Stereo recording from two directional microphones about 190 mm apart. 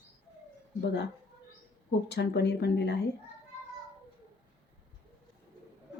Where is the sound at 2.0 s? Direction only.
60° left (ahead or behind).